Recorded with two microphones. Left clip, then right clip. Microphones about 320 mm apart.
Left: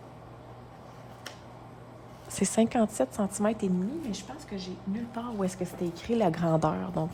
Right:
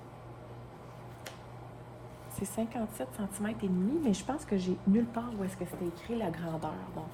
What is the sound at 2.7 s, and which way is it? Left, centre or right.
A woman's voice, centre.